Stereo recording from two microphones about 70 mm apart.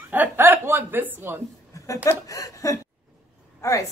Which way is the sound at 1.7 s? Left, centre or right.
Left.